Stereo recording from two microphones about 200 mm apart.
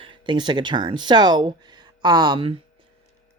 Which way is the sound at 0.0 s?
25° right (ahead or behind).